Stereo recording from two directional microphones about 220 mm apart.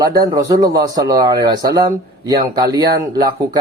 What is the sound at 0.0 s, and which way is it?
Speech, 15° right (ahead or behind).